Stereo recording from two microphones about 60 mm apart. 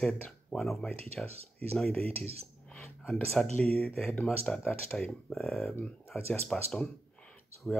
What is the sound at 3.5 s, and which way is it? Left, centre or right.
Speech, left.